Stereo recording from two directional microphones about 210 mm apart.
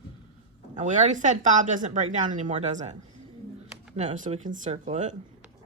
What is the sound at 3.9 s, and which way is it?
Speech, 35° right (ahead or behind).